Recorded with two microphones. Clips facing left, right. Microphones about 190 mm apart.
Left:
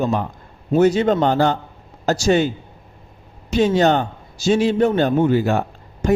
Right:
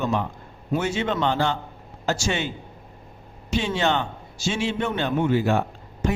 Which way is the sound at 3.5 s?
40° left (ahead or behind).